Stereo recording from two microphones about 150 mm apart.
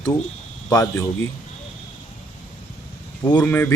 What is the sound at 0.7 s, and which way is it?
Speech, 20° left (ahead or behind).